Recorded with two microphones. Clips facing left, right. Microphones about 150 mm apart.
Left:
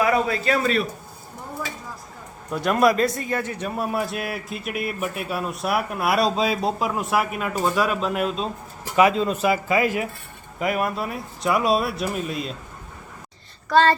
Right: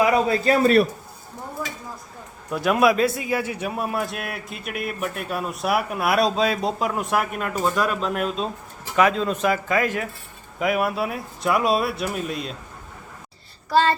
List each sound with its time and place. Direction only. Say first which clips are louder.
0.0 s a sound: right 2 dB; 20° right (ahead or behind)
0.4 s a man's voice: right 4 dB; 35° right (ahead or behind)
2.5 s a man's voice: even; 5° right (ahead or behind)